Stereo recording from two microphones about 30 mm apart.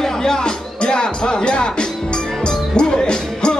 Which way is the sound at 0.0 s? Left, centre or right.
Left.